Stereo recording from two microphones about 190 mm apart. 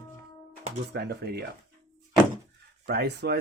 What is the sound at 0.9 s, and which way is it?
Speech, 55° right (ahead or behind).